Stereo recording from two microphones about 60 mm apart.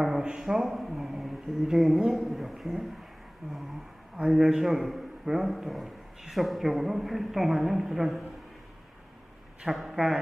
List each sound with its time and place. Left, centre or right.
0.0 s a sound: centre
0.5 s a man's voice: centre
4.3 s a man's voice: centre
9.6 s speech: centre